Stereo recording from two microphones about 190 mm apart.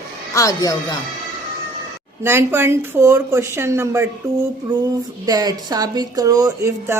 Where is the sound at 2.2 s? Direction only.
15° right (ahead or behind).